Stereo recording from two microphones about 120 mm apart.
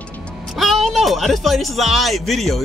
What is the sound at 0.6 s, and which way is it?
Speech, centre (ahead or behind).